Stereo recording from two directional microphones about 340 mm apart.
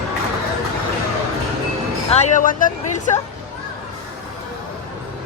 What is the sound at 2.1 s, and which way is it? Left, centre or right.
Speech, centre.